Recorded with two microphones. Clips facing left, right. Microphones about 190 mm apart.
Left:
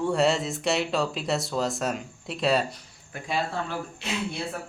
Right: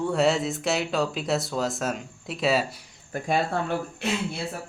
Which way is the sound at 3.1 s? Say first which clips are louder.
Right 4 dB; 50° right (ahead or behind).